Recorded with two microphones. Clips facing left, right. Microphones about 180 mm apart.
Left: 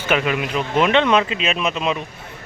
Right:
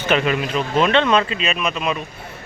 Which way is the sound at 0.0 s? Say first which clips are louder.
Right 1 dB; 10° left (ahead or behind).